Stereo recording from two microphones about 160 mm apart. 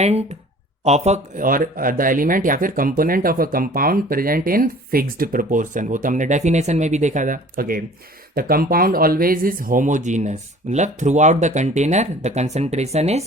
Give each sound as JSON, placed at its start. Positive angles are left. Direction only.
{"t": 0.0, "sound": "speech", "side_deg": -40}